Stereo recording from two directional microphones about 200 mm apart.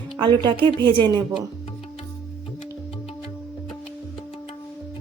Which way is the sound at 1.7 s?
30° left (ahead or behind).